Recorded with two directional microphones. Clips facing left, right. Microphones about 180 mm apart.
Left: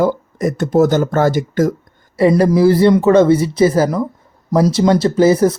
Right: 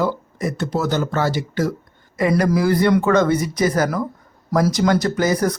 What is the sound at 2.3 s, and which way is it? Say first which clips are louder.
Speech: left 5 dB; 25° left (ahead or behind).